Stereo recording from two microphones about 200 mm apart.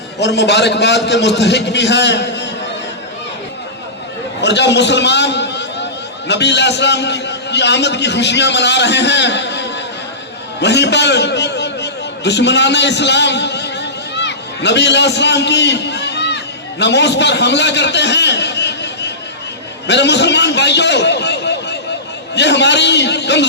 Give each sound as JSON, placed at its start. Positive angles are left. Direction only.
{"t": 0.2, "sound": "a man's voice", "side_deg": 60}
{"t": 4.4, "sound": "a man's voice", "side_deg": 60}